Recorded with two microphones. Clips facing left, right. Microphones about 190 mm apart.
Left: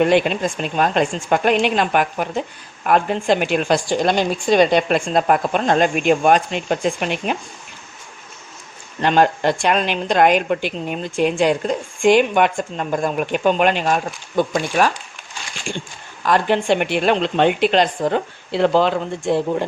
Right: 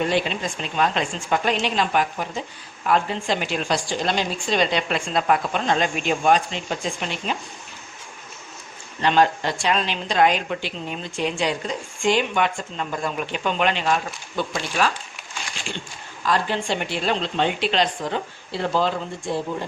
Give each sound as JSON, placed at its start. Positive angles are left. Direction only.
{"t": 0.0, "sound": "a woman's voice", "side_deg": 60}
{"t": 9.0, "sound": "a woman's voice", "side_deg": 50}
{"t": 16.2, "sound": "a woman's voice", "side_deg": 60}